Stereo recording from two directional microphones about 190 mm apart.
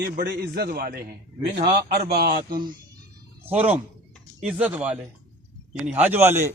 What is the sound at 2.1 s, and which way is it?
Speech, 55° right (ahead or behind).